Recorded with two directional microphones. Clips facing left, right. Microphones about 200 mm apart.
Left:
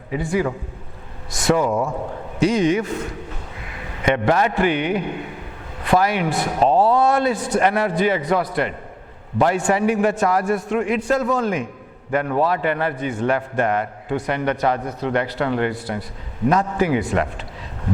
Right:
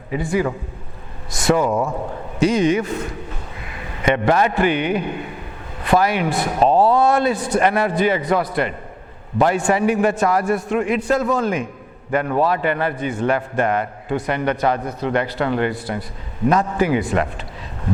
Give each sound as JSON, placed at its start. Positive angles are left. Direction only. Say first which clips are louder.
{"t": 0.1, "sound": "a man's voice", "louder": "right 1 dB", "side_deg": -15}
{"t": 1.6, "sound": "speech", "louder": "right 1 dB", "side_deg": -30}
{"t": 2.4, "sound": "a man's voice", "louder": "right 1 dB", "side_deg": -10}